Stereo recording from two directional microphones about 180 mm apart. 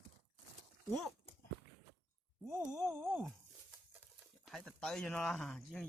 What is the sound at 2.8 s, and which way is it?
Speech, centre (ahead or behind).